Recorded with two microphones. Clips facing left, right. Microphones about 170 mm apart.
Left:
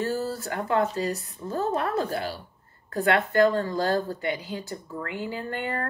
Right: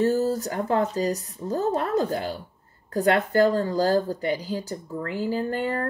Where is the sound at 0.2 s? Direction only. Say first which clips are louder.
Right 5 dB; 35° right (ahead or behind).